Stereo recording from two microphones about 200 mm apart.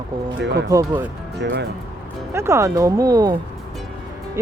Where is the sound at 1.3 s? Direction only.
55° right (ahead or behind).